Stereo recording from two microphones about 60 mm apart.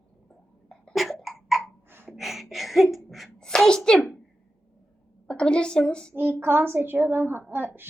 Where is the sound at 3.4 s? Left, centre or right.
Centre.